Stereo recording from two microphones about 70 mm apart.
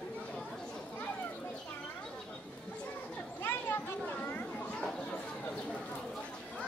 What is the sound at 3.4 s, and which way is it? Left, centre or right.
Children playing, left.